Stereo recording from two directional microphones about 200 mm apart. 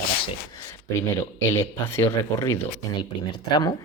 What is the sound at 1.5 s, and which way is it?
Speech, 10° left (ahead or behind).